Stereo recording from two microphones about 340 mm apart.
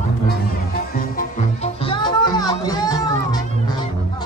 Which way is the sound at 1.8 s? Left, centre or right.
Centre.